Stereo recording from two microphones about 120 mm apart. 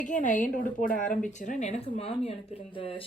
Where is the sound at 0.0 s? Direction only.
90° left.